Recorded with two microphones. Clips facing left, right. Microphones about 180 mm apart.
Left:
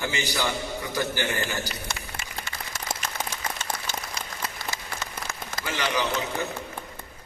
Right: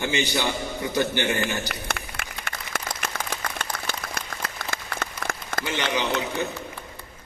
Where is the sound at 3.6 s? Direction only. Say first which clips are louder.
Right 1 dB; 55° right (ahead or behind).